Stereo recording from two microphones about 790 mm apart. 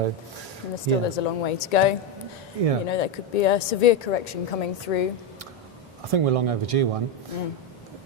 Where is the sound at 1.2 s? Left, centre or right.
Left.